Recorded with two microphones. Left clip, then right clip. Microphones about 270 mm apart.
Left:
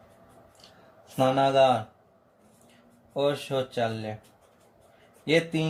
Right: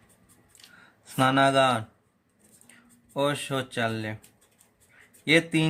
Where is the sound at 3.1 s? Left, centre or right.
Right.